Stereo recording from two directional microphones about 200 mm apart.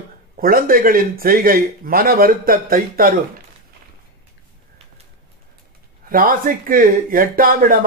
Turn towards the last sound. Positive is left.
turn(degrees=-45)  # may be behind; listen again after turning